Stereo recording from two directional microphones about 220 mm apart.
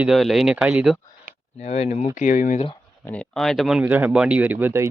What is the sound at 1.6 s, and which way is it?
A man's voice, 30° left (ahead or behind).